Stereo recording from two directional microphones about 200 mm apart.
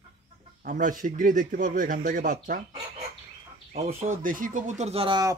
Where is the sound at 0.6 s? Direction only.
40° right (ahead or behind).